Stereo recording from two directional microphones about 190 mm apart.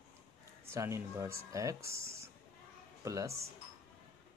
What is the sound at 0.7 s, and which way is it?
Speech, 15° right (ahead or behind).